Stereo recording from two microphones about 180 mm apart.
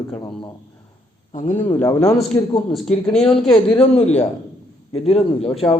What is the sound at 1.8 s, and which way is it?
Speech, 15° left (ahead or behind).